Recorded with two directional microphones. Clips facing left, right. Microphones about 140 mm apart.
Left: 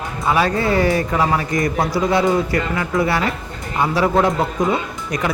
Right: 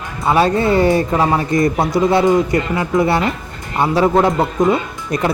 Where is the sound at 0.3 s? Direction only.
25° right (ahead or behind).